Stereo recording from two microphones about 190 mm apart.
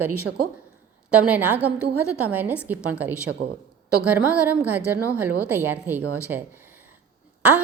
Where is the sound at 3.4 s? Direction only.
60° right (ahead or behind).